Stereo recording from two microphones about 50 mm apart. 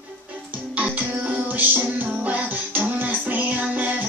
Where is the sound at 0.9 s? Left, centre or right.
Right.